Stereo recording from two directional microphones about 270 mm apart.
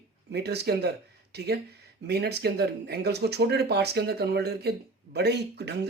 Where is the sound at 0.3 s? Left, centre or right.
Right.